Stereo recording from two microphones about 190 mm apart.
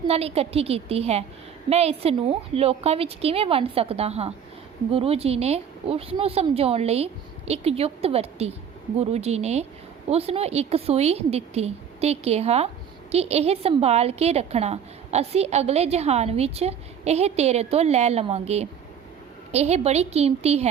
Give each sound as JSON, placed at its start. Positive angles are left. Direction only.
{"t": 0.1, "sound": "a woman's voice", "side_deg": -30}